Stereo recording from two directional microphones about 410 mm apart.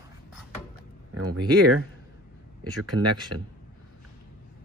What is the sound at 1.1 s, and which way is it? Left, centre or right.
Speech, right.